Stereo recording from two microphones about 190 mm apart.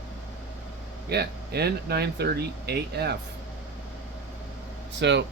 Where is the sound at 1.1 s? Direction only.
60° right (ahead or behind).